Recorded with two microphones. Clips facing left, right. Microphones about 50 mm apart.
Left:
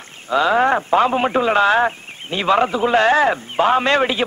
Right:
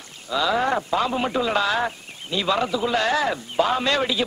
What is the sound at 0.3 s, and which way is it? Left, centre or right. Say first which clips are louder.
A man's voice: left 6 dB; left.